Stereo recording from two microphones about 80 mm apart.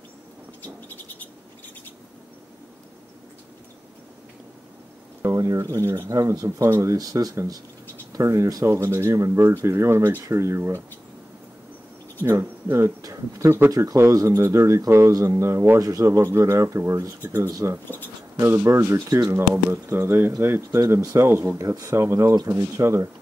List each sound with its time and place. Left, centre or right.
5.2 s speech: right
8.1 s speech: right
8.7 s speech: right
12.2 s speech: right
18.4 s speech: right
19.3 s speech: right
20.8 s speech: right
22.3 s speech: right